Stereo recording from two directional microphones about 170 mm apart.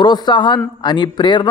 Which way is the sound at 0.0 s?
25° left (ahead or behind).